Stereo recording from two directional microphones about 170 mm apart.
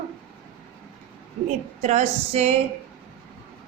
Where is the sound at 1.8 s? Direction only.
45° right (ahead or behind).